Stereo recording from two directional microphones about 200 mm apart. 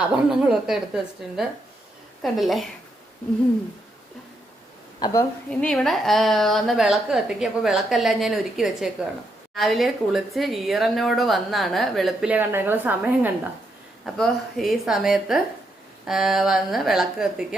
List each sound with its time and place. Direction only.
0.3 s speech: 5° right (ahead or behind)
4.9 s a woman's voice: 20° left (ahead or behind)
5.5 s speech: 5° left (ahead or behind)